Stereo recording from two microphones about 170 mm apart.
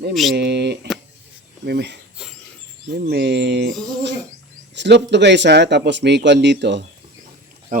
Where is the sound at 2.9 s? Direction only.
75° right (ahead or behind).